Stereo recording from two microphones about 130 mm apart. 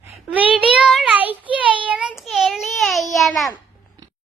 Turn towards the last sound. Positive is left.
turn(degrees=0)  # may be behind; listen again after turning